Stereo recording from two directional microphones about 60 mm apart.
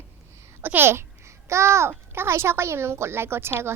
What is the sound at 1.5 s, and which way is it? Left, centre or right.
A child's voice, right.